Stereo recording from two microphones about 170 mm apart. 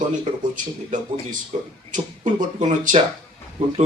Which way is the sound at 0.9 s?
50° right (ahead or behind).